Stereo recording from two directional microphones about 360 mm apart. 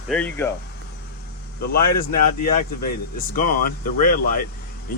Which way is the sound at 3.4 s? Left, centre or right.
Left.